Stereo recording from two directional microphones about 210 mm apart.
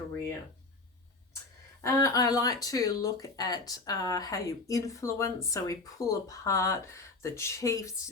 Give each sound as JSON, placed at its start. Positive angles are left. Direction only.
{"t": 1.8, "sound": "speech", "side_deg": 15}